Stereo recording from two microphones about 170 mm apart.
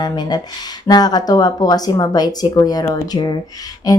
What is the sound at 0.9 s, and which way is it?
Speech, 25° left (ahead or behind).